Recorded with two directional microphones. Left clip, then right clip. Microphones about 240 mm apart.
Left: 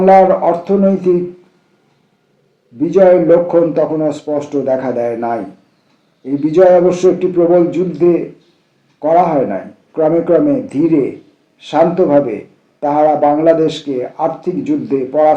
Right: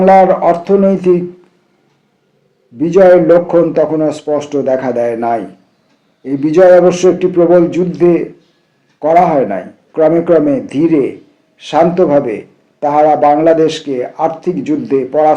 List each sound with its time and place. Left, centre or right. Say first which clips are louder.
0.0 s a man's voice: right 1 dB; right
2.7 s a man's voice: right 2 dB; right